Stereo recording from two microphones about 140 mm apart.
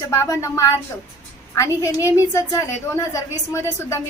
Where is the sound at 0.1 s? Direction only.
20° left (ahead or behind).